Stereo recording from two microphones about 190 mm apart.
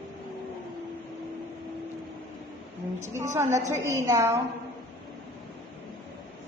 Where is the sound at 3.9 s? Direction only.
15° right (ahead or behind).